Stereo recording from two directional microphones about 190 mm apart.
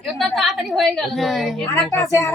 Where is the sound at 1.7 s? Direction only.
15° left (ahead or behind).